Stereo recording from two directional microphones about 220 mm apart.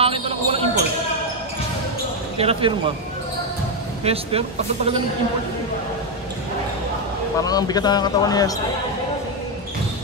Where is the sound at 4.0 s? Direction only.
25° right (ahead or behind).